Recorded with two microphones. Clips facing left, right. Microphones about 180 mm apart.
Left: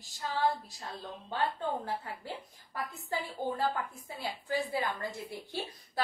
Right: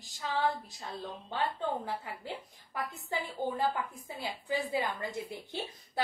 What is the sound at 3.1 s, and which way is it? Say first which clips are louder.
A woman's voice: even; 20° right (ahead or behind).